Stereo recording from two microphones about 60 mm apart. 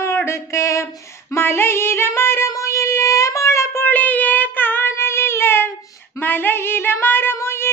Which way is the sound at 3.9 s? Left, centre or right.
Left.